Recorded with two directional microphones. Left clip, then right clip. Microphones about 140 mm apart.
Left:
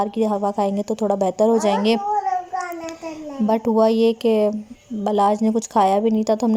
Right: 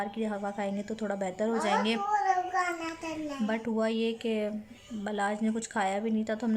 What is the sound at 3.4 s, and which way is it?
A woman's voice, 40° left (ahead or behind).